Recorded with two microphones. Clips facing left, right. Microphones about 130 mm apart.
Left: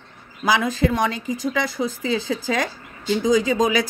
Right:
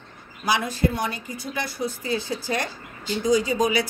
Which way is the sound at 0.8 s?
90° left.